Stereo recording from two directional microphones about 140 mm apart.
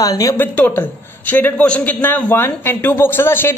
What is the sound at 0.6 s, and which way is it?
A woman's voice, 15° left (ahead or behind).